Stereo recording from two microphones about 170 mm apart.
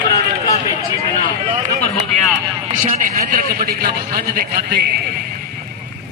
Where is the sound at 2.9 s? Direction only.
55° right (ahead or behind); by 5.2 s 70° right (ahead or behind).